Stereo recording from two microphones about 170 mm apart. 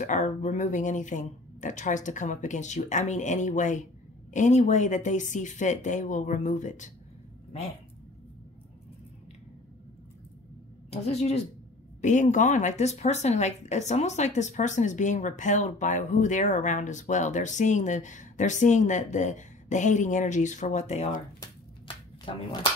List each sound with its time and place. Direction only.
0.0 s speech: 45° left (ahead or behind)
10.9 s speech: 40° left (ahead or behind)
21.8 s shuffling cards: 30° left (ahead or behind)